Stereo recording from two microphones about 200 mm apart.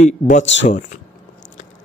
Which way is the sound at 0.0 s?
35° left (ahead or behind).